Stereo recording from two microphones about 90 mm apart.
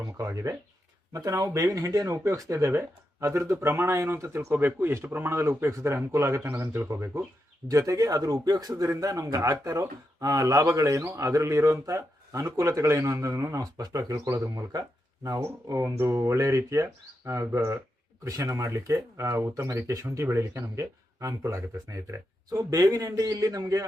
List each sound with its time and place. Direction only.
0.0 s speech: 35° right (ahead or behind)